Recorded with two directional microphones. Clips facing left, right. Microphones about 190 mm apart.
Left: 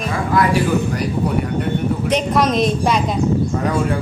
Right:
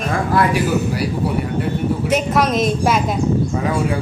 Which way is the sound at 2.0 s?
5° right (ahead or behind).